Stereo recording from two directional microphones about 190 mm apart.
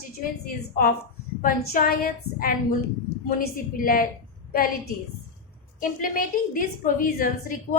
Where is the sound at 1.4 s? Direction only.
50° left (ahead or behind).